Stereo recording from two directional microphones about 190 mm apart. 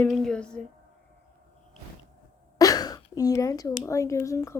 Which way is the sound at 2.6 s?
20° left (ahead or behind).